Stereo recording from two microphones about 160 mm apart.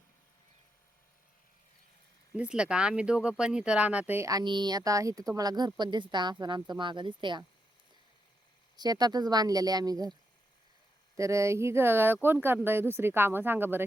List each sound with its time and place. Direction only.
2.3 s speech: 5° right (ahead or behind); by 7.4 s 30° right (ahead or behind)
8.7 s speech: 25° right (ahead or behind)
11.2 s speech: 20° right (ahead or behind)